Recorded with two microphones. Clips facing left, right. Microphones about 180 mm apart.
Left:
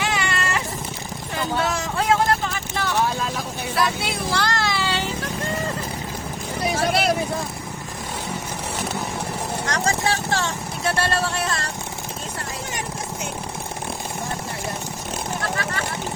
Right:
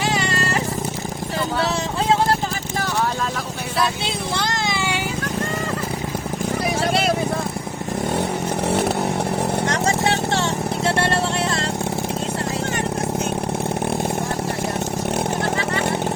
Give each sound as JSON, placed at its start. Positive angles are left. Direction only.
{"t": 0.0, "sound": "music", "side_deg": -40}
{"t": 3.8, "sound": "vehicle", "side_deg": -25}
{"t": 9.6, "sound": "vehicle", "side_deg": -25}